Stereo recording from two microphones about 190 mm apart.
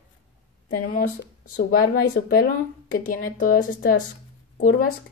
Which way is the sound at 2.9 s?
50° left (ahead or behind).